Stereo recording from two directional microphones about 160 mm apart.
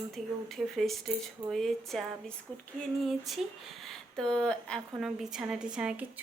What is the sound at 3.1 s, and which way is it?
Speech, centre (ahead or behind).